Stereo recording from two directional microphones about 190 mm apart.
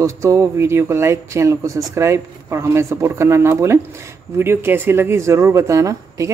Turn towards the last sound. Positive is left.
turn(degrees=-15)  # may be behind; listen again after turning